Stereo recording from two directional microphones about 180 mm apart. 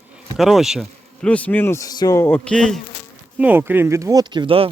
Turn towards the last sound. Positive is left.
turn(degrees=-30)  # may be behind; listen again after turning